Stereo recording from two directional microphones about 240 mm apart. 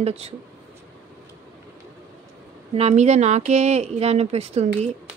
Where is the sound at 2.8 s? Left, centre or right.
Right.